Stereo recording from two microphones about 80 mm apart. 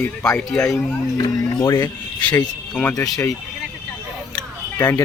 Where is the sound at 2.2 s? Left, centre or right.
Centre.